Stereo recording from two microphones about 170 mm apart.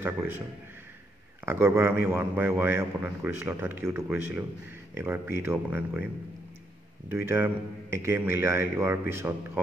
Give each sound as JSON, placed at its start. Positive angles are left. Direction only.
{"t": 0.0, "sound": "a man's voice", "side_deg": -15}
{"t": 1.4, "sound": "a man's voice", "side_deg": -15}
{"t": 7.1, "sound": "a man's voice", "side_deg": -15}